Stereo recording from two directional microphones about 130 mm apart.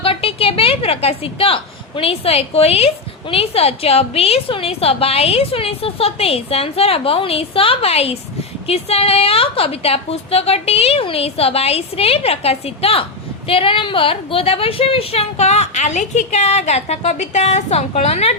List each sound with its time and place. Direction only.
0.0 s a woman's voice: 45° left (ahead or behind)